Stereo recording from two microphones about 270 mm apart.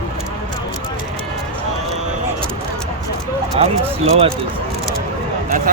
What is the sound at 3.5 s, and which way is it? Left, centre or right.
Speech, right.